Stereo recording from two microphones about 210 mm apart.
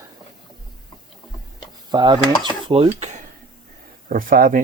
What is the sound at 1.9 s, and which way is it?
Speech, 20° right (ahead or behind).